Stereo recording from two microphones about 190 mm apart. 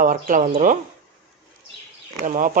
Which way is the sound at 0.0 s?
45° right (ahead or behind).